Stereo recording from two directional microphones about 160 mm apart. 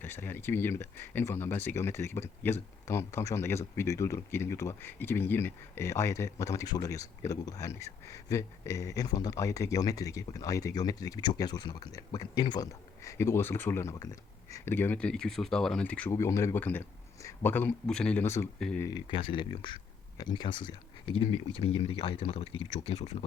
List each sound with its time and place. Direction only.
0.0 s speech: 15° left (ahead or behind)
18.9 s speech: 30° left (ahead or behind)